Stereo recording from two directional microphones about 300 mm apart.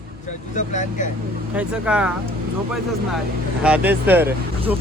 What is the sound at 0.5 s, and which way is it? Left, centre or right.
Speech, left.